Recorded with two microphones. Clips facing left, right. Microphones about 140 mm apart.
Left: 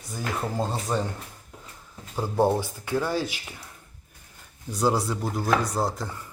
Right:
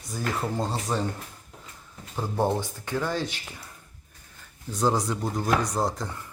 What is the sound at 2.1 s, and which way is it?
Speech, 10° left (ahead or behind).